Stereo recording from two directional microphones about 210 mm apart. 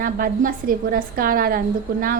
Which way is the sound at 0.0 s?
40° right (ahead or behind).